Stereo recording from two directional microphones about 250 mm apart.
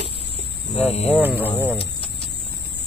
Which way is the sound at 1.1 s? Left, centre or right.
Centre.